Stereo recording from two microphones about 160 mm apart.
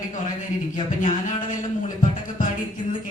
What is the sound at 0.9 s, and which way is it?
Speech, 50° left (ahead or behind).